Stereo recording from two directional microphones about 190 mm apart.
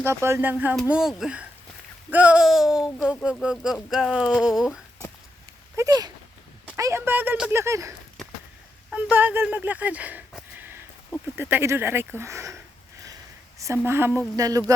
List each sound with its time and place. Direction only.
0.0 s speech: 15° right (ahead or behind)
5.7 s speech: 20° right (ahead or behind)
11.3 s speech: 10° right (ahead or behind)
13.8 s speech: 10° right (ahead or behind)
14.3 s a sound: 20° right (ahead or behind)